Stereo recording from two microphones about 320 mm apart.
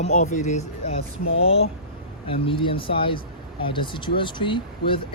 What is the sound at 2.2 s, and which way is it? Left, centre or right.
Speech, centre.